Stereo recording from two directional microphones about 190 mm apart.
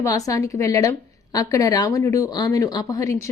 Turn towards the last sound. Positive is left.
turn(degrees=15)  # may be behind; listen again after turning